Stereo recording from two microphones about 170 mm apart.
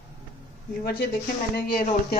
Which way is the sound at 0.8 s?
65° left (ahead or behind).